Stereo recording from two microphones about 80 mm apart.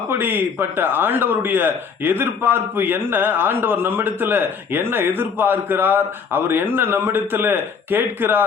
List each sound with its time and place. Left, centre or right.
0.1 s a man's voice: right